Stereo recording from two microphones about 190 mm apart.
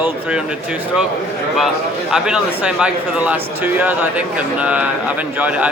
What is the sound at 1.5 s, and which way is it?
A man's voice, centre (ahead or behind).